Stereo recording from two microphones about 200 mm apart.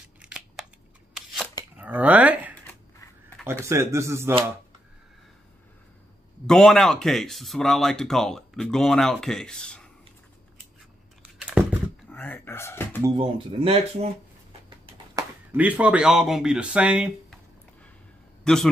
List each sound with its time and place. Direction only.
0.2 s scissors: 5° right (ahead or behind)
1.1 s shuffling cards: centre (ahead or behind)
1.8 s speech: 10° right (ahead or behind)
3.6 s a man's voice: 15° right (ahead or behind)
6.4 s speech: 5° left (ahead or behind)
11.2 s typing: 5° right (ahead or behind)
12.1 s a sound: 10° left (ahead or behind)
13.0 s speech: 25° right (ahead or behind)
15.2 s a sound: 15° right (ahead or behind)
15.5 s speech: 5° right (ahead or behind)
18.4 s a man's voice: 5° left (ahead or behind)